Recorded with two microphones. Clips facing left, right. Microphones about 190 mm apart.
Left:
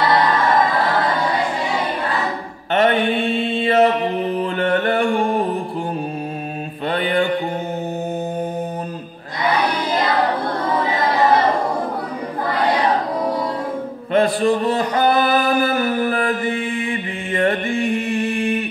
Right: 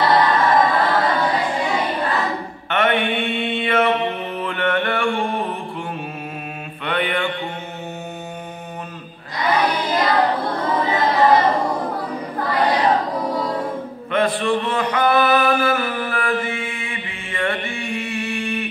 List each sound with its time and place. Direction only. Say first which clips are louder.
2.7 s mantra: left 3 dB; 35° left (ahead or behind)
6.9 s mantra: left 3 dB; 35° left (ahead or behind)
14.1 s a sound: left 3 dB; 40° left (ahead or behind)
17.8 s music: left 4 dB; 45° left (ahead or behind)